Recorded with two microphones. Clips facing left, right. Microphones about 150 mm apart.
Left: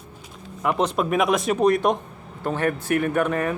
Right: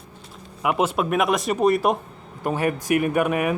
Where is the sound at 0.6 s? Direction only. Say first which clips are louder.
Even; 5° right (ahead or behind).